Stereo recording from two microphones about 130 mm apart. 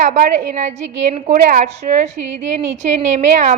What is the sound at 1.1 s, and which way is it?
Speech, 70° right (ahead or behind).